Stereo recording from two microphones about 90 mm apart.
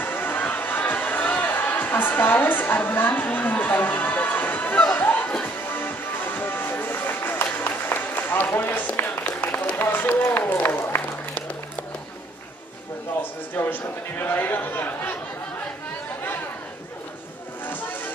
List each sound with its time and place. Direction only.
0.0 s a sound: 20° left (ahead or behind)
5.3 s music: 20° left (ahead or behind)
13.6 s a man's voice: 20° left (ahead or behind)
17.6 s music: 20° left (ahead or behind)